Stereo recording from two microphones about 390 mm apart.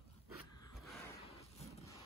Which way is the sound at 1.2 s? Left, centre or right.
Centre.